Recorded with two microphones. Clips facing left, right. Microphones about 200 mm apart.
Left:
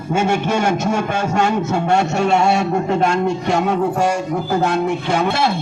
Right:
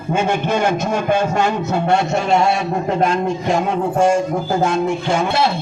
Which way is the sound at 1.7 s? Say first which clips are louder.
Even; 70° left (ahead or behind).